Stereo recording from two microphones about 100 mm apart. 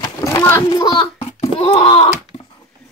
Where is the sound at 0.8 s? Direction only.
80° left; by 2.1 s 65° left (ahead or behind).